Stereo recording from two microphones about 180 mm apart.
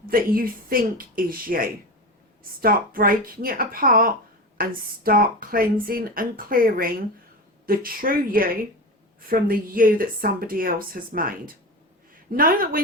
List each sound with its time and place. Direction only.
0.0 s speech: 55° right (ahead or behind)